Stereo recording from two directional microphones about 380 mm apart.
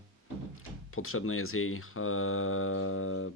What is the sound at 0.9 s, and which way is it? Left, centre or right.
Speech, left.